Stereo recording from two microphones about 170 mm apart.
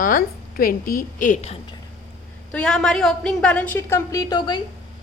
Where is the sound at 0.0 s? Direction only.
55° left (ahead or behind).